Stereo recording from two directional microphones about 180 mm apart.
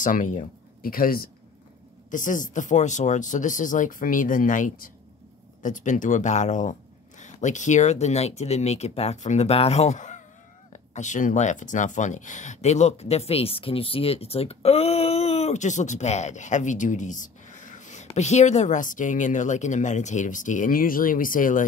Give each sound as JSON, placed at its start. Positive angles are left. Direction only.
{"t": 0.0, "sound": "speech", "side_deg": 45}